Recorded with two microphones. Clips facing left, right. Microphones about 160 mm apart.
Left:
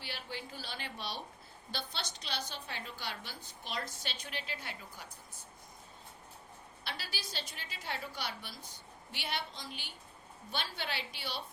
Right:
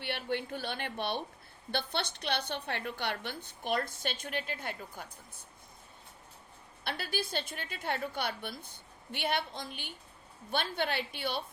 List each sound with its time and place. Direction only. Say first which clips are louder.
0.0 s a woman's voice: right 9 dB; 60° right (ahead or behind)
6.8 s a woman's voice: right 9 dB; 55° right (ahead or behind)